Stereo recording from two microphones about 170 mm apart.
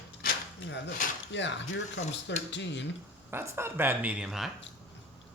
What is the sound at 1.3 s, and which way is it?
Speech, 90° left.